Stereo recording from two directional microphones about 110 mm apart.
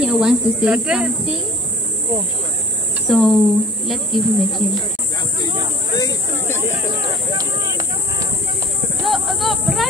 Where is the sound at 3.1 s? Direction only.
Centre (ahead or behind).